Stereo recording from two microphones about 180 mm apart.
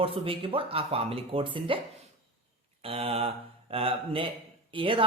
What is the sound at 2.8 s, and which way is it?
A woman's voice, 30° right (ahead or behind).